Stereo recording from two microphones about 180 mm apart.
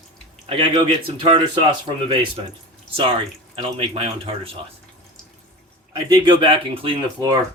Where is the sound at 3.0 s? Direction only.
30° right (ahead or behind).